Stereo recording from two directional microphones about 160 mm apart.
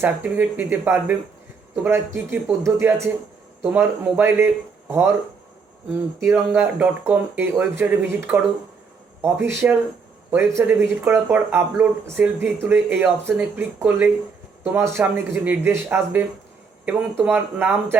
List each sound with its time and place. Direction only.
0.0 s speech: 10° right (ahead or behind)